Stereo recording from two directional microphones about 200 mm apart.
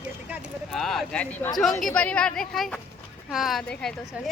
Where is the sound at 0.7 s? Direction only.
Centre (ahead or behind).